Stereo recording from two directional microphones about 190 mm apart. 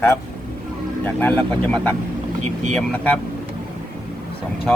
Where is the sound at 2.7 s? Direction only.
5° left (ahead or behind).